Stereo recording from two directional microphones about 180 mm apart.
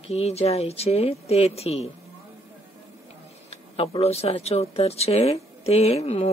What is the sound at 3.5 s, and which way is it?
Speech, 35° left (ahead or behind).